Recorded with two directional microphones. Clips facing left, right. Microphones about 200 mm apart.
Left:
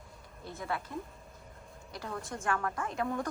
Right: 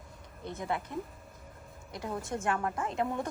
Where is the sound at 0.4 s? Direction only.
20° right (ahead or behind).